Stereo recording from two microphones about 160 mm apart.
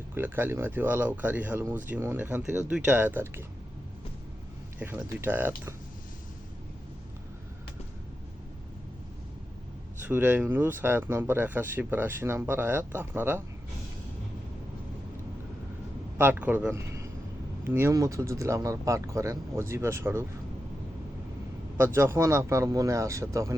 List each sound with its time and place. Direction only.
0.1 s speech: 15° right (ahead or behind)
4.8 s speech: 10° right (ahead or behind)
10.0 s speech: 10° right (ahead or behind)
16.1 s a man's voice: 10° right (ahead or behind)
21.8 s speech: 15° right (ahead or behind)